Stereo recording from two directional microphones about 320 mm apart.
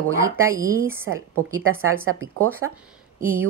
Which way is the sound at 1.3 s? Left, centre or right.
Right.